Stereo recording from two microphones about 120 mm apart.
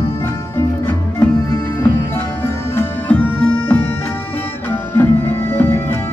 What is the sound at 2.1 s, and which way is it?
Music, 20° left (ahead or behind).